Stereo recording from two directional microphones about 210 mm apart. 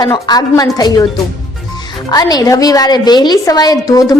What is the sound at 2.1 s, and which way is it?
A woman's voice, 20° left (ahead or behind).